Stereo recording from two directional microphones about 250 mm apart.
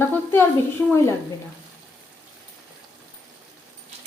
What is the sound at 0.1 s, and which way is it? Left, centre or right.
A woman's voice, centre.